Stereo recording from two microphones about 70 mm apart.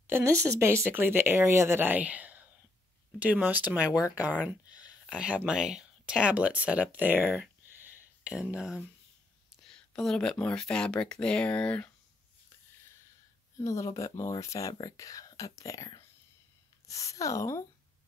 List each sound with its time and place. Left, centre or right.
0.2 s speech: right
3.9 s speech: left
4.6 s a sound: left
5.1 s speech: centre
7.7 s a sound: right
8.2 s speech: centre
9.6 s speech: centre
13.7 s speech: left